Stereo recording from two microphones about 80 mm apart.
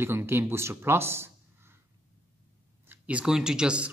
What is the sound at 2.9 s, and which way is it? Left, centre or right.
Speech, centre.